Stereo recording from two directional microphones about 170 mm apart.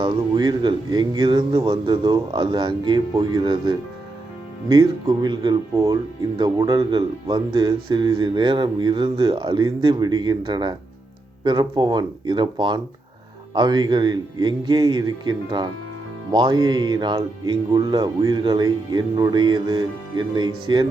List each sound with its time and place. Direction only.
0.0 s speech: 25° right (ahead or behind)